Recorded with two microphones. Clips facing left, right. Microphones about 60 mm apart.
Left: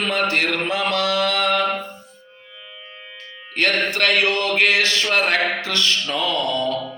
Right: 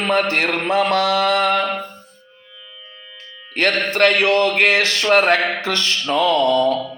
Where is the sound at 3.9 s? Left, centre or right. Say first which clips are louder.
Right 4 dB; right.